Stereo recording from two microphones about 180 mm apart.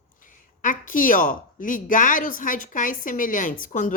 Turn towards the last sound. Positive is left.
turn(degrees=45)  # may be behind; listen again after turning